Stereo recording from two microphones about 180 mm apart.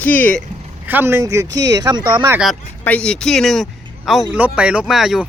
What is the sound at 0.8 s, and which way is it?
Speech, 10° right (ahead or behind).